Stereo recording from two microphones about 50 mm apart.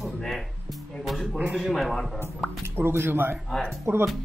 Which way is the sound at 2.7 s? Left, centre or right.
Right.